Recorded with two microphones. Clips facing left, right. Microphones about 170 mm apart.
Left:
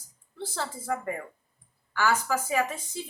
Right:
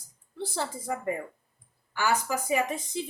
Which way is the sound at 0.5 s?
15° right (ahead or behind).